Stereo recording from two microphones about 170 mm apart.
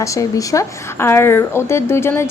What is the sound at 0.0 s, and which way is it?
Speech, 20° left (ahead or behind).